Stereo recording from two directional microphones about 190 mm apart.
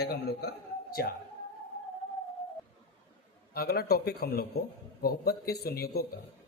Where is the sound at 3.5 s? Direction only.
55° left (ahead or behind).